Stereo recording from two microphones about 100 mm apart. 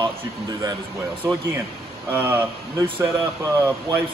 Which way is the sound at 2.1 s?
20° right (ahead or behind).